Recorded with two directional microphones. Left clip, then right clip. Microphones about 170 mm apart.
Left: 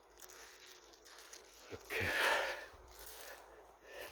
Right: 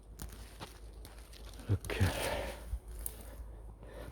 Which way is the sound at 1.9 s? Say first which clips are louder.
Left 3 dB; centre (ahead or behind).